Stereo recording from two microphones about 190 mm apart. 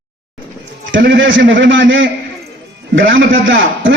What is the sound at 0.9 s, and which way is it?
A man's voice, 80° right.